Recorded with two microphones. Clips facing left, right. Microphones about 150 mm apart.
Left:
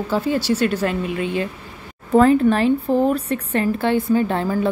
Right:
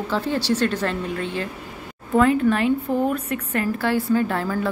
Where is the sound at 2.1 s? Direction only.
35° left (ahead or behind).